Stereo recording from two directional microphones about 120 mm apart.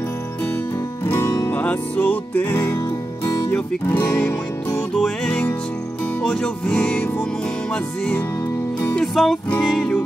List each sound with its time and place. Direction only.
1.0 s music: 20° left (ahead or behind)
4.9 s music: 5° left (ahead or behind)